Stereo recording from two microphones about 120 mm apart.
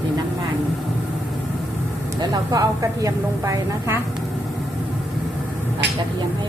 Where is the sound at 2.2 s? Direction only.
35° right (ahead or behind).